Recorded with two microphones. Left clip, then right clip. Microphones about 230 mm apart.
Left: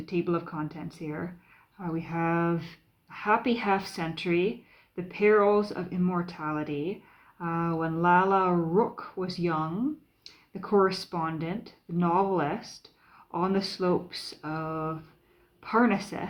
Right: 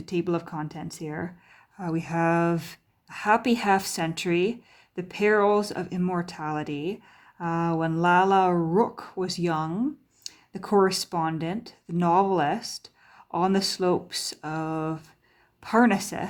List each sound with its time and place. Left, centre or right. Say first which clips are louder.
0.0 s speech: right 2 dB; right